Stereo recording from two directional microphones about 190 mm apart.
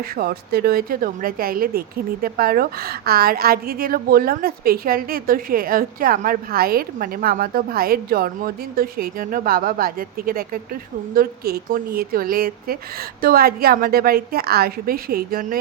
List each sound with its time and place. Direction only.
0.0 s a woman's voice: 55° right (ahead or behind)